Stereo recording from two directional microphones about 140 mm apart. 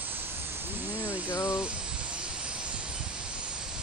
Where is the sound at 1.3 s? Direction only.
20° left (ahead or behind).